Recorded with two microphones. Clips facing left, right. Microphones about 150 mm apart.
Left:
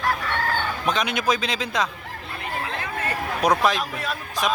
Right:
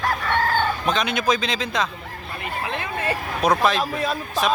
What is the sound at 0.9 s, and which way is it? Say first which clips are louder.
Speech: left 2 dB; 10° left (ahead or behind).